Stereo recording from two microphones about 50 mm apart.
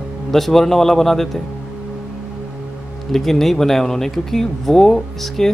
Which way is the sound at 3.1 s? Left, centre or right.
Centre.